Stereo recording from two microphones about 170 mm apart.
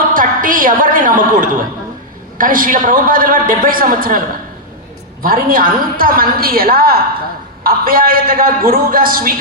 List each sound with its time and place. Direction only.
0.1 s a woman's voice: 55° right (ahead or behind)
5.2 s a woman's voice: 55° right (ahead or behind)